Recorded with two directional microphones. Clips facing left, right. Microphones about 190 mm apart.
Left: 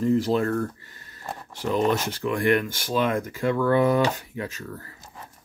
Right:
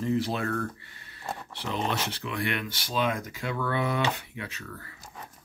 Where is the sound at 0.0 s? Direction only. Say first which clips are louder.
Left 6 dB; 45° left (ahead or behind).